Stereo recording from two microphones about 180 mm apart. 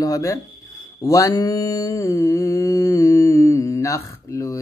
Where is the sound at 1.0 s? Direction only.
20° left (ahead or behind).